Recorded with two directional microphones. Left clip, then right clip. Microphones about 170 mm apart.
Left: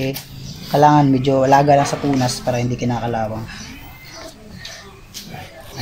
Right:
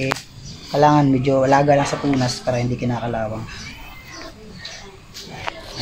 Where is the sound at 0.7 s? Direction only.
25° left (ahead or behind).